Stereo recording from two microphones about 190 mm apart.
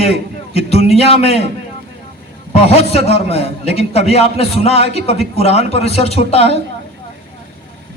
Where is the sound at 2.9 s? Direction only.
30° left (ahead or behind).